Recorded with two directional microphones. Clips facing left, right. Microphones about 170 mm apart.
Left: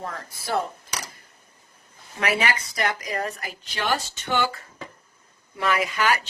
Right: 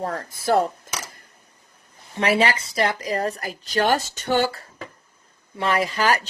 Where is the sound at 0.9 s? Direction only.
50° right (ahead or behind).